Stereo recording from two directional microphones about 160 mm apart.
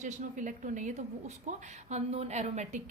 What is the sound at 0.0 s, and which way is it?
A woman's voice, 50° right (ahead or behind).